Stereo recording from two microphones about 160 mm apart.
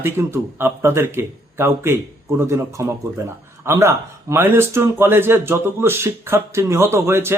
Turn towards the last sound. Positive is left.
turn(degrees=-15)  # may be behind; listen again after turning